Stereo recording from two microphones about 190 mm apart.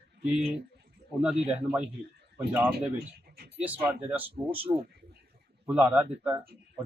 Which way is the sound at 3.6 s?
10° right (ahead or behind).